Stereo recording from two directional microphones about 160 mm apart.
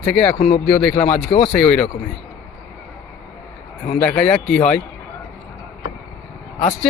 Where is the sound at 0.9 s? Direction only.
40° left (ahead or behind).